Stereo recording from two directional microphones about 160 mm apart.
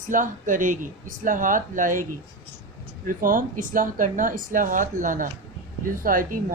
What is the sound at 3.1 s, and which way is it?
A woman's voice, 60° right (ahead or behind).